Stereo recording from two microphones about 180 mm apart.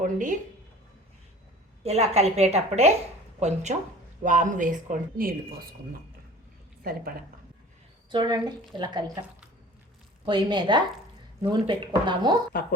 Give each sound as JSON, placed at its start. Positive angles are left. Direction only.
{"t": 0.0, "sound": "speech", "side_deg": -45}
{"t": 1.8, "sound": "a woman's voice", "side_deg": -35}
{"t": 8.1, "sound": "speech", "side_deg": -25}
{"t": 10.2, "sound": "speech", "side_deg": -25}